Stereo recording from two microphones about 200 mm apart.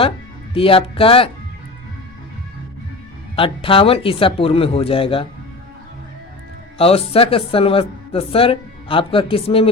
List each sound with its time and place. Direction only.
0.5 s speech: 25° left (ahead or behind)
3.3 s speech: 25° left (ahead or behind)
6.7 s speech: 30° left (ahead or behind)